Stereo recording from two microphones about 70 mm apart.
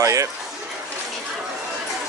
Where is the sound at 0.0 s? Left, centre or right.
Right.